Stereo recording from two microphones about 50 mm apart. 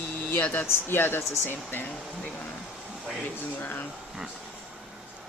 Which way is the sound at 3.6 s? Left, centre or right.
Left.